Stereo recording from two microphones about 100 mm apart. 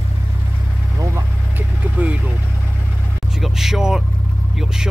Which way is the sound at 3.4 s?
5° right (ahead or behind).